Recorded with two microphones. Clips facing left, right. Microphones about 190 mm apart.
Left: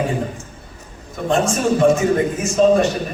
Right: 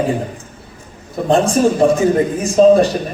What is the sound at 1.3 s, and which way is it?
A man's voice, 35° right (ahead or behind).